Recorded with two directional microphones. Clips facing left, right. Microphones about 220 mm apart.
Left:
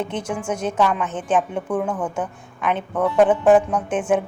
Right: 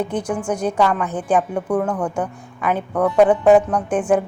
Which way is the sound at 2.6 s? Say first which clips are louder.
Right 2 dB; 5° right (ahead or behind).